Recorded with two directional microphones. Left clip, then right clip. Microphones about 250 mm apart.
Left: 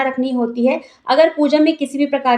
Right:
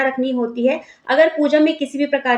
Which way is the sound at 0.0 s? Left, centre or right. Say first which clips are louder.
Even; left.